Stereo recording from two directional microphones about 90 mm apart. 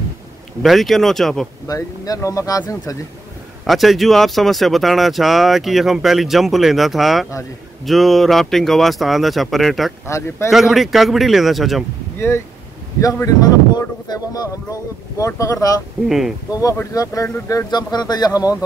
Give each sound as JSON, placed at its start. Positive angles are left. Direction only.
{"t": 0.6, "sound": "speech", "side_deg": 0}
{"t": 1.7, "sound": "speech", "side_deg": 40}
{"t": 3.6, "sound": "speech", "side_deg": 0}
{"t": 10.0, "sound": "speech", "side_deg": 35}
{"t": 10.5, "sound": "speech", "side_deg": -5}
{"t": 13.0, "sound": "speech", "side_deg": 40}
{"t": 16.1, "sound": "speech", "side_deg": -5}
{"t": 16.9, "sound": "speech", "side_deg": 40}
{"t": 17.6, "sound": "speech", "side_deg": 50}